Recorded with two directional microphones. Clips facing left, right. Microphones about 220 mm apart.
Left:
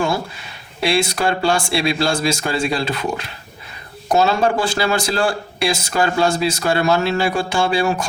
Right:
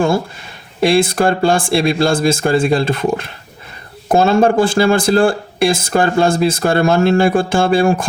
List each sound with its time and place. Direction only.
0.8 s speech: 50° right (ahead or behind)